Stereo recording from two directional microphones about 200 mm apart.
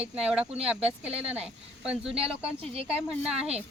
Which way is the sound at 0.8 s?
30° right (ahead or behind).